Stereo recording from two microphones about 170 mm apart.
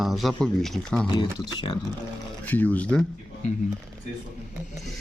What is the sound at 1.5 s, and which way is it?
Speech, 30° left (ahead or behind).